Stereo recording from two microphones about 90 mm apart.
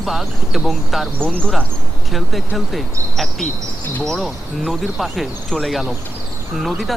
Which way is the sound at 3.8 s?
20° left (ahead or behind).